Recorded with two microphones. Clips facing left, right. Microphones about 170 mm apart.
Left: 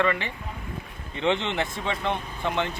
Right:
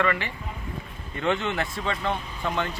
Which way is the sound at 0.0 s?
20° left (ahead or behind).